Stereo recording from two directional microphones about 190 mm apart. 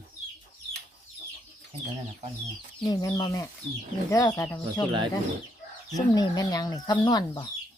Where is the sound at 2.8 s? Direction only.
20° left (ahead or behind).